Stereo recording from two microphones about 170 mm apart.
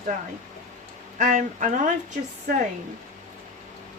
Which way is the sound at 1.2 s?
50° right (ahead or behind).